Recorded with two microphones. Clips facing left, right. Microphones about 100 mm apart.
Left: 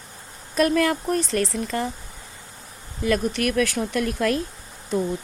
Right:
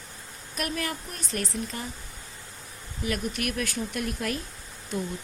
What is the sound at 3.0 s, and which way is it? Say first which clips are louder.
Speech: left 8 dB; 90° left.